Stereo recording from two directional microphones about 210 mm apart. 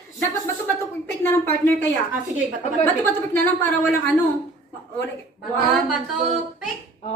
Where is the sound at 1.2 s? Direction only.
10° left (ahead or behind).